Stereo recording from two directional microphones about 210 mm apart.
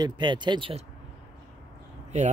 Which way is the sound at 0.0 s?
20° right (ahead or behind).